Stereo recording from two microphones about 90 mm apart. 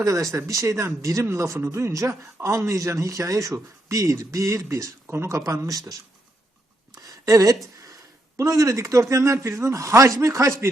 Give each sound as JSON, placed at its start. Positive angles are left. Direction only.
{"t": 0.0, "sound": "speech", "side_deg": -40}
{"t": 5.5, "sound": "speech", "side_deg": -40}
{"t": 6.9, "sound": "a sound", "side_deg": -40}
{"t": 8.4, "sound": "speech", "side_deg": -35}